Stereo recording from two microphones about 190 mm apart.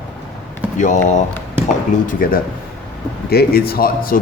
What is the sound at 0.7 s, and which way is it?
Speech, 40° left (ahead or behind).